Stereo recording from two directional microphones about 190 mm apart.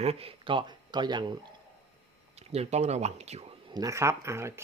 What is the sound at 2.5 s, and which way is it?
Speech, 35° right (ahead or behind).